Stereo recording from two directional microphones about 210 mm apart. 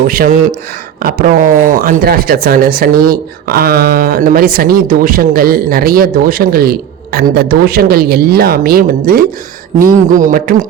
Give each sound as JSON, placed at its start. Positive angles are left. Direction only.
{"t": 0.1, "sound": "speech", "side_deg": -45}